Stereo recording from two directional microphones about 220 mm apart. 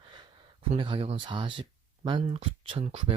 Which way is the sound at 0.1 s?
20° right (ahead or behind).